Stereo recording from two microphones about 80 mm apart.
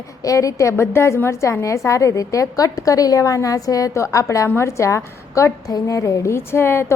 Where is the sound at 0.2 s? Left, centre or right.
Left.